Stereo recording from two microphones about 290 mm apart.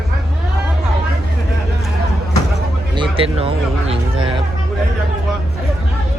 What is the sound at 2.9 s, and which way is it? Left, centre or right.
Speech, centre.